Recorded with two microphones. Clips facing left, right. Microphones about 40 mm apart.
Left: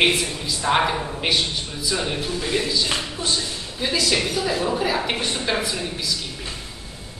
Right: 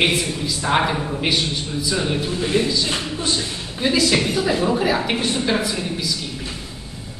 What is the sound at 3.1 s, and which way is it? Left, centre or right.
A man's voice, centre.